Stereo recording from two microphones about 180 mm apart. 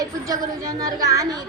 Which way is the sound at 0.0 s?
20° right (ahead or behind).